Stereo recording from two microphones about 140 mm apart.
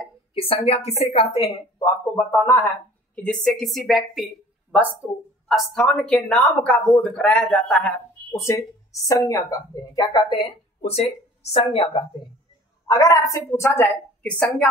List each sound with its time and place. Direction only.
0.3 s a woman's voice: 40° left (ahead or behind)
1.8 s a woman's voice: 20° left (ahead or behind)
3.2 s a woman's voice: 5° left (ahead or behind)
5.5 s speech: centre (ahead or behind)
8.3 s speech: 20° left (ahead or behind); by 12.0 s 35° left (ahead or behind)
12.8 s a woman's voice: 25° left (ahead or behind); by 14.7 s 5° left (ahead or behind)